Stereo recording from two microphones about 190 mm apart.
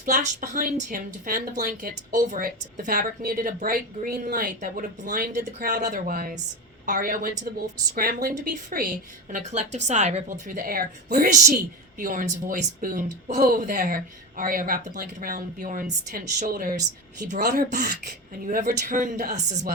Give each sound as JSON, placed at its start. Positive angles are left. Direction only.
{"t": 0.0, "sound": "a woman's voice", "side_deg": -45}